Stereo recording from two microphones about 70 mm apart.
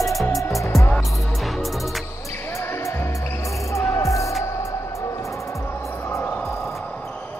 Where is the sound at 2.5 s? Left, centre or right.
Left.